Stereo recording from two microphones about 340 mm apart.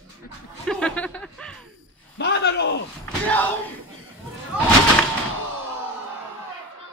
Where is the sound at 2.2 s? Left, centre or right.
Left.